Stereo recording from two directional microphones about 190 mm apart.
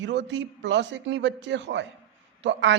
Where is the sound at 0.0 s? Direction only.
70° right (ahead or behind).